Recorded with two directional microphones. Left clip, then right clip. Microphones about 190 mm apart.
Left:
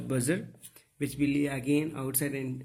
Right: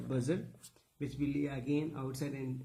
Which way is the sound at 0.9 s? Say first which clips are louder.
Left 8 dB; 15° left (ahead or behind).